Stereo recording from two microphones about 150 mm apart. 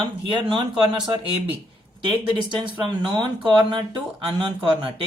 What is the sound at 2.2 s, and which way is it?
Speech, 30° right (ahead or behind).